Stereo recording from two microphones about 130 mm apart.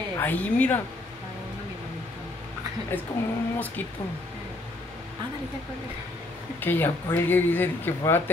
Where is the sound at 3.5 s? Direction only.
15° left (ahead or behind).